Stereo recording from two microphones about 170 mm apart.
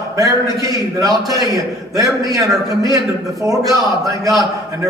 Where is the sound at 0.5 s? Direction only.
20° right (ahead or behind).